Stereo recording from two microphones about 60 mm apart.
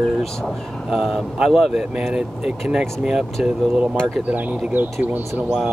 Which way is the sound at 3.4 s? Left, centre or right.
Centre.